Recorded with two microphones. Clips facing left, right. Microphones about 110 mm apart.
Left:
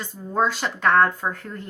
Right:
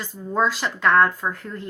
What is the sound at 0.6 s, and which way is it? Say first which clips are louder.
Speech: even; 30° left (ahead or behind).